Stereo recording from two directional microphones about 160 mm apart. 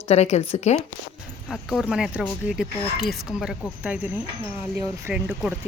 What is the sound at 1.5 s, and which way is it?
Speech, centre (ahead or behind).